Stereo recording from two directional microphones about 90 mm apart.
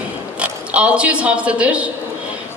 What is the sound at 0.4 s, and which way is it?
A woman's voice, 15° right (ahead or behind).